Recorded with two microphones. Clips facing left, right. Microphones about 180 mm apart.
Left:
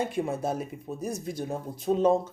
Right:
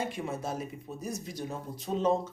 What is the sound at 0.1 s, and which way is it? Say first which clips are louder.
Speech: left 6 dB; 55° left (ahead or behind).